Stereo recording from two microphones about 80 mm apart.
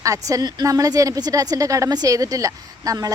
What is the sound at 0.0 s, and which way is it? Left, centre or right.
Speech, right.